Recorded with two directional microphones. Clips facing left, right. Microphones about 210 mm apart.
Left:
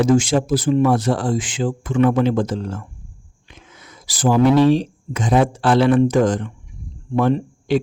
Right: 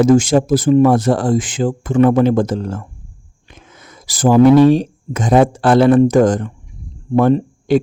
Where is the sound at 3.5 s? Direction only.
45° right (ahead or behind).